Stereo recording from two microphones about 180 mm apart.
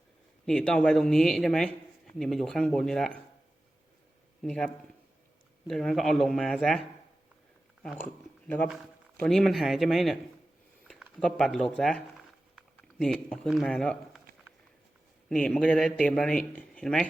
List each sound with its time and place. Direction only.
0.4 s speech: 5° left (ahead or behind)
4.4 s speech: 5° left (ahead or behind)
9.1 s speech: 5° left (ahead or behind)
11.2 s speech: 5° left (ahead or behind)
15.3 s speech: 5° left (ahead or behind)